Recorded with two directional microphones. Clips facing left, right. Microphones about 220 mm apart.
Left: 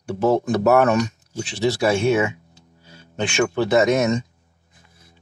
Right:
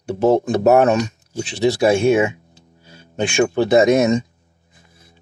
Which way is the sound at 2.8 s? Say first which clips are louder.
Right 4 dB; 15° right (ahead or behind).